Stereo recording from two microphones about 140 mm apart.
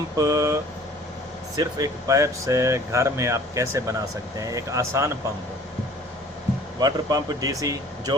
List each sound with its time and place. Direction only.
0.2 s speech: 25° right (ahead or behind)
6.7 s speech: 30° right (ahead or behind)